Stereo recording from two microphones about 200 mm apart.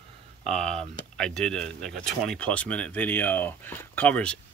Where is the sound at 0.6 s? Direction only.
30° right (ahead or behind).